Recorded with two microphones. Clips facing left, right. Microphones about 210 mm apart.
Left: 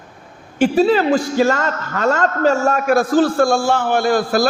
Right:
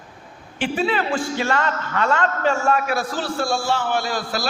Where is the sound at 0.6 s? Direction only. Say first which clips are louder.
Left 9 dB; 40° left (ahead or behind).